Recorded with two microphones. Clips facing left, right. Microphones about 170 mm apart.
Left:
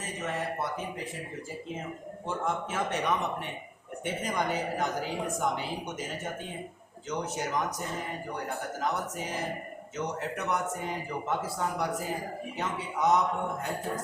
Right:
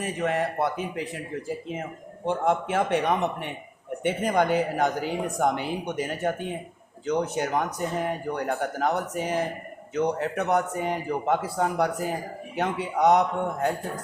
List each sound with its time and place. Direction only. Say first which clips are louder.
0.0 s speech: right 8 dB; 65° right (ahead or behind)
2.2 s a man's voice: right 8 dB; 65° right (ahead or behind)